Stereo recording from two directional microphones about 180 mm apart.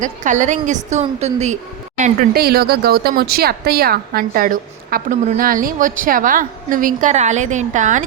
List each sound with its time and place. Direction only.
0.0 s a woman's voice: 45° right (ahead or behind)
2.3 s a woman's voice: 60° right (ahead or behind); by 8.0 s 45° right (ahead or behind)